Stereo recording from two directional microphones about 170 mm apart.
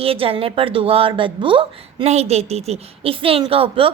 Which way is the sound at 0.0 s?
35° right (ahead or behind).